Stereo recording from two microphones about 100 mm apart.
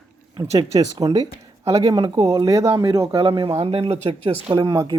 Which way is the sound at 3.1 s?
60° right (ahead or behind).